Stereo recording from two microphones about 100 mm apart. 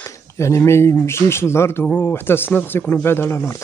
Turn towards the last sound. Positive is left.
turn(degrees=25)  # may be behind; listen again after turning